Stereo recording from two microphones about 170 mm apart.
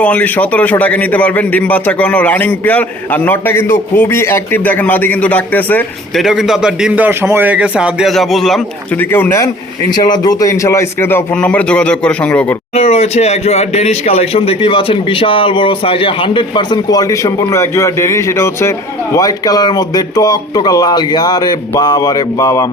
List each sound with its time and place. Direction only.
0.0 s a man's voice: 10° left (ahead or behind)
6.2 s a man's voice: centre (ahead or behind)
9.0 s a man's voice: 15° left (ahead or behind)
12.7 s speech: 35° left (ahead or behind); by 22.6 s 20° left (ahead or behind)